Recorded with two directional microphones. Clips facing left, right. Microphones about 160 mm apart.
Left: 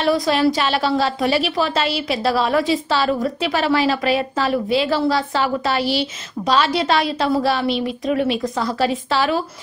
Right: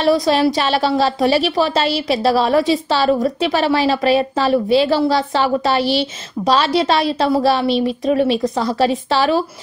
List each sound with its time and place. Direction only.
0.0 s a woman's voice: 30° right (ahead or behind)